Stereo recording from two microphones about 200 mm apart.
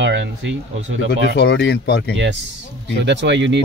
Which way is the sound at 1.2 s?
55° left (ahead or behind).